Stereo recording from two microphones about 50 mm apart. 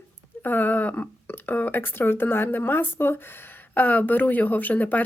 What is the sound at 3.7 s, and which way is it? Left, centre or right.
Speech, left.